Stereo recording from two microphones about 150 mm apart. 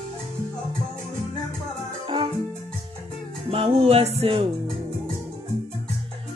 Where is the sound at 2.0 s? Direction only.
35° right (ahead or behind).